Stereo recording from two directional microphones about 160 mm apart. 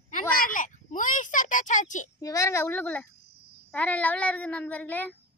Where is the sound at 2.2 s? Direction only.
20° left (ahead or behind).